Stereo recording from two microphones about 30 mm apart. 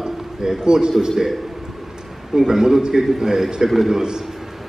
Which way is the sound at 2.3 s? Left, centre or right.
Centre.